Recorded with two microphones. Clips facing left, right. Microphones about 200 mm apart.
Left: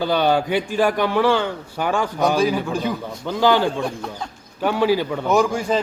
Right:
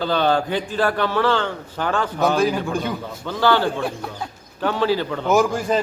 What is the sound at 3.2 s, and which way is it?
Speech, 15° left (ahead or behind).